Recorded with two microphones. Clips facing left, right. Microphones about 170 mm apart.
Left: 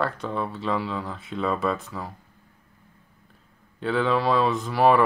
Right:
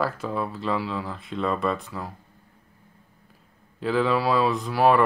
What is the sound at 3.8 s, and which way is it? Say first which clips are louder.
Speech: even; centre (ahead or behind).